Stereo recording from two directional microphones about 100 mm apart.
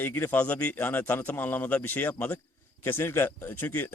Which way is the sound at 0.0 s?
20° left (ahead or behind).